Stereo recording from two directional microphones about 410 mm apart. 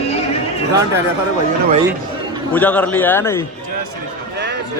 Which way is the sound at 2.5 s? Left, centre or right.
Centre.